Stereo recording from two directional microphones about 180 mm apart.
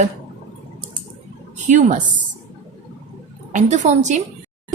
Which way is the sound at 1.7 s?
40° right (ahead or behind).